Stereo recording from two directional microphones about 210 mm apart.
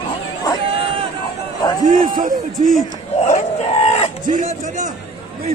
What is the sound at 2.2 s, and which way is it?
Speech, 40° right (ahead or behind).